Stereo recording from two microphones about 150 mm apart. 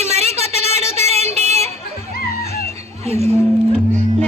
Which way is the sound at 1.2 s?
20° left (ahead or behind).